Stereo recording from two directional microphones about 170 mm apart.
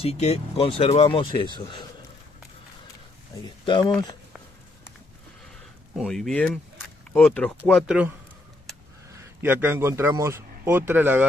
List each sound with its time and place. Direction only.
0.0 s speech: 40° left (ahead or behind)
3.6 s speech: 30° left (ahead or behind)
5.9 s speech: centre (ahead or behind)
9.2 s speech: 10° right (ahead or behind)